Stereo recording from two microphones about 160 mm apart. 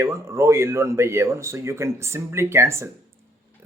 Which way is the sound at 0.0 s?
15° right (ahead or behind).